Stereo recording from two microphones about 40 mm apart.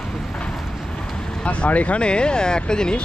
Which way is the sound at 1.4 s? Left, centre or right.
Left.